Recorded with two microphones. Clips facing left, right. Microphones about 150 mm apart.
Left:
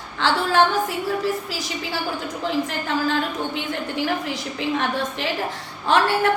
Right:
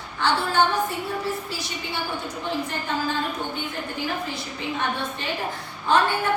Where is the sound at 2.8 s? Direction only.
90° left.